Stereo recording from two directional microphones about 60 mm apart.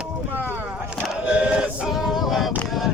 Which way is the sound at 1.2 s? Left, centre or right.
Centre.